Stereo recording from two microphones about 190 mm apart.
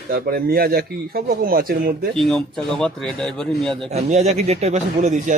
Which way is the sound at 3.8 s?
35° right (ahead or behind).